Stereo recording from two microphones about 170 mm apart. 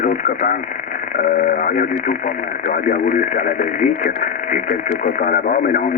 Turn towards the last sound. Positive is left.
turn(degrees=55)  # may be behind; listen again after turning